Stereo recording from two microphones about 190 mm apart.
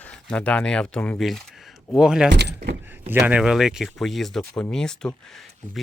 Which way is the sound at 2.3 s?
60° right (ahead or behind).